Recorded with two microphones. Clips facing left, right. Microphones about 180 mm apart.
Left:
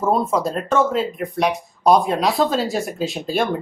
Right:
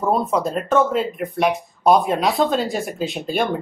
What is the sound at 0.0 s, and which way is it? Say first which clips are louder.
Speech: left 1 dB; centre (ahead or behind).